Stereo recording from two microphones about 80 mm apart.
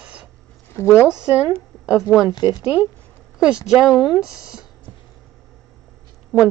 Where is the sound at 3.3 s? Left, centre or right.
Centre.